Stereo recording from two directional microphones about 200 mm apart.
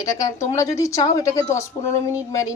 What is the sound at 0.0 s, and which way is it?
Speech, 15° left (ahead or behind).